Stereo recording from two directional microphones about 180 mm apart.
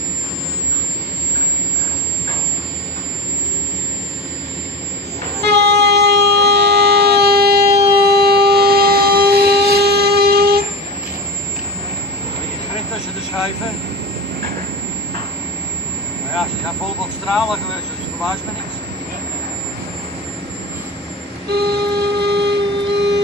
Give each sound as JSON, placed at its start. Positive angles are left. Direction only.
{"t": 5.4, "sound": "train", "side_deg": -70}
{"t": 17.3, "sound": "vehicle", "side_deg": 0}
{"t": 21.5, "sound": "vehicle", "side_deg": -65}